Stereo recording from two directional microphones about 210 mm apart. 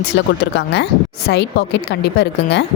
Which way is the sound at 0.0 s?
55° left (ahead or behind).